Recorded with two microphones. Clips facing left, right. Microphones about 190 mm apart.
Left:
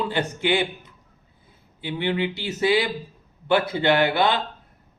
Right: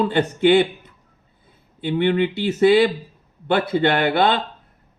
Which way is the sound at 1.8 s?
55° right (ahead or behind).